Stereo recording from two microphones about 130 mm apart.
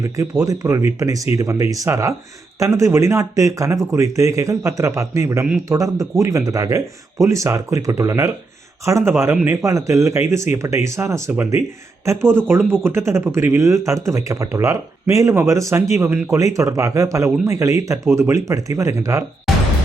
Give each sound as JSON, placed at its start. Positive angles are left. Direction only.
{"t": 0.0, "sound": "speech", "side_deg": -25}